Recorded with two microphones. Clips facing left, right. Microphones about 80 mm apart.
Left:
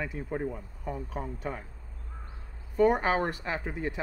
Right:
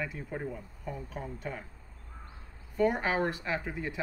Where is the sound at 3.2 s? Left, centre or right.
Left.